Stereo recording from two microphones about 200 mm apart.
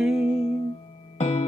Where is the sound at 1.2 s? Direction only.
35° left (ahead or behind).